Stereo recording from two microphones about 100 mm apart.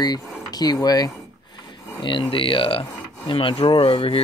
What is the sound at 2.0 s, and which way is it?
Speech, 55° left (ahead or behind).